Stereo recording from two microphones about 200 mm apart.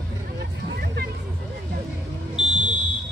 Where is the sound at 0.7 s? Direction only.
50° right (ahead or behind).